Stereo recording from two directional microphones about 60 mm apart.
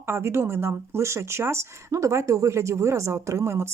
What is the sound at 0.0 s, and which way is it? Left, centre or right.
Speech, right.